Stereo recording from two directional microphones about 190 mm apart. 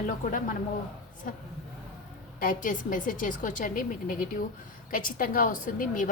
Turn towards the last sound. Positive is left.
turn(degrees=45)  # may be behind; listen again after turning